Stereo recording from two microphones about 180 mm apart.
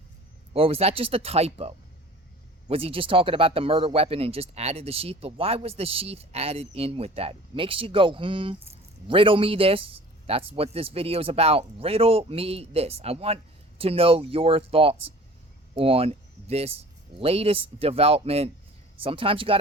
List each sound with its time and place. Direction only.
0.5 s speech: 35° right (ahead or behind)